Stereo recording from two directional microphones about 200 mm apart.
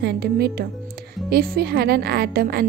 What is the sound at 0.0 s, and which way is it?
A woman's voice, 55° right (ahead or behind).